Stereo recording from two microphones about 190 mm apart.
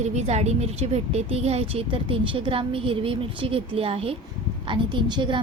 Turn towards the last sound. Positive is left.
turn(degrees=-25)  # may be behind; listen again after turning